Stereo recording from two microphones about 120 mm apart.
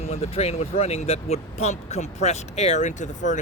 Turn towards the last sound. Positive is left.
turn(degrees=90)